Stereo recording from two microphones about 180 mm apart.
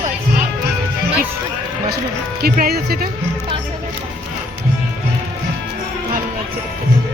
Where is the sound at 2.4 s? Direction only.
60° right (ahead or behind).